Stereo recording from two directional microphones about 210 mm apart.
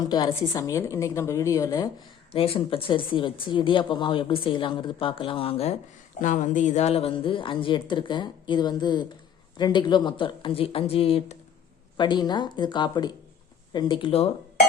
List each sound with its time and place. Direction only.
0.1 s a woman's voice: 20° left (ahead or behind)
2.3 s speech: 25° left (ahead or behind)